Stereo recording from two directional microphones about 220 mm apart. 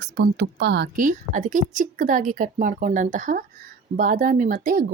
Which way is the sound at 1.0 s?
35° right (ahead or behind).